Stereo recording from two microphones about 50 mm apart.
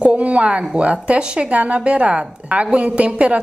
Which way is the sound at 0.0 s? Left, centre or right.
Right.